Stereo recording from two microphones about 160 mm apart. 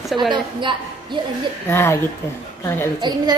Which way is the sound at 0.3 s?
30° right (ahead or behind).